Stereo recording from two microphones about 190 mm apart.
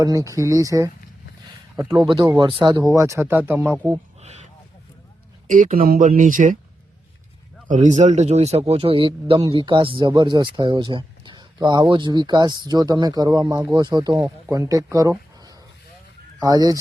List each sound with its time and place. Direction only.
0.0 s speech: 15° right (ahead or behind)
2.0 s speech: 25° right (ahead or behind)
4.2 s a sound: 35° right (ahead or behind)
5.5 s speech: 45° right (ahead or behind)
7.7 s speech: 40° right (ahead or behind); by 15.1 s 15° right (ahead or behind)
16.4 s speech: 20° right (ahead or behind)